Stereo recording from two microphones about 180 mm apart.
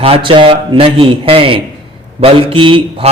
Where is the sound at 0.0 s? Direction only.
30° right (ahead or behind).